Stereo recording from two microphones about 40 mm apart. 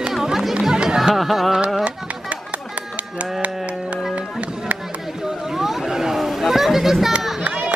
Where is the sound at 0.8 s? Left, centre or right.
Centre.